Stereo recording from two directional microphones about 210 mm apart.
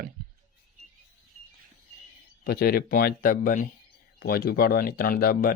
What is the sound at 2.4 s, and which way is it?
Speech, 50° left (ahead or behind).